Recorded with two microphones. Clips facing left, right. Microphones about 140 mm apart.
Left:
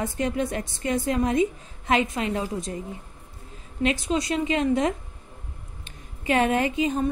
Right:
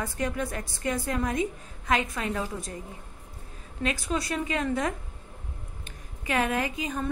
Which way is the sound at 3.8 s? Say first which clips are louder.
Left 5 dB; 25° left (ahead or behind).